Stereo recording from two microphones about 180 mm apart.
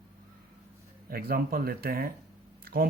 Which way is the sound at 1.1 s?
55° right (ahead or behind).